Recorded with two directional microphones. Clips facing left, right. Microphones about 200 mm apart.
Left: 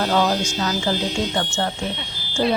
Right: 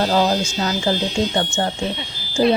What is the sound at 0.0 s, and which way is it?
A woman's voice, 30° right (ahead or behind).